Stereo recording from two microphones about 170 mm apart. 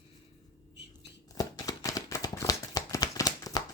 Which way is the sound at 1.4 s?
20° left (ahead or behind).